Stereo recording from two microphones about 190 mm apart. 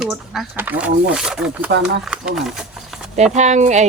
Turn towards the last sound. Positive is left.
turn(degrees=-40)  # may be behind; listen again after turning